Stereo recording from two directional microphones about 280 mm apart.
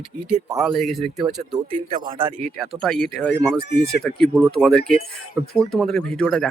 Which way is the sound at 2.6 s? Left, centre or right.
Centre.